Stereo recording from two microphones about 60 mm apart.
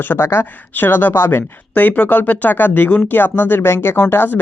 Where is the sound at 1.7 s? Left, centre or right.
Left.